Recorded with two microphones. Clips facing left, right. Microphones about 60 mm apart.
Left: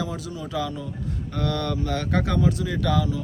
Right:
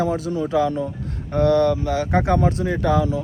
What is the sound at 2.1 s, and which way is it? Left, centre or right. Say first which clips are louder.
Speech: right 7 dB; right.